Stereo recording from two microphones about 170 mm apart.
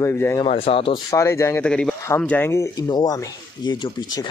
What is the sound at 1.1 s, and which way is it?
Speech, 15° left (ahead or behind).